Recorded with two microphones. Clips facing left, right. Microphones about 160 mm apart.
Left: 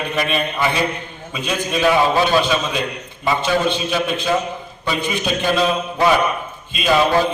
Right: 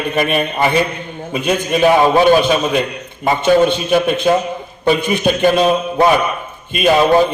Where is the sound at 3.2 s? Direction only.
55° right (ahead or behind).